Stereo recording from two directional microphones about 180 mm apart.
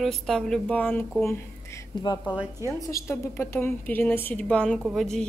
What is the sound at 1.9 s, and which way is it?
A woman's voice, 25° left (ahead or behind).